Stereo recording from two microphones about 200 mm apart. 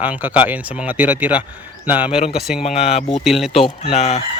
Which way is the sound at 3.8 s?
35° left (ahead or behind).